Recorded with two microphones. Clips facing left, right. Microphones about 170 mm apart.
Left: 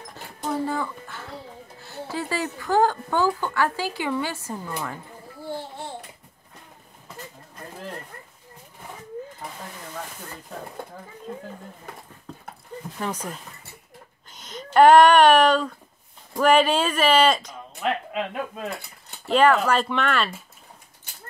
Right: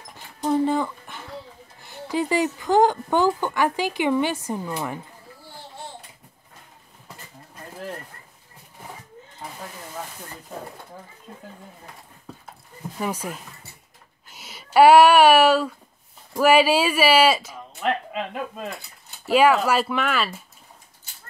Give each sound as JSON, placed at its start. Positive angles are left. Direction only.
{"t": 0.5, "sound": "a sound", "side_deg": -20}
{"t": 1.8, "sound": "speech", "side_deg": -15}
{"t": 13.0, "sound": "speech", "side_deg": -10}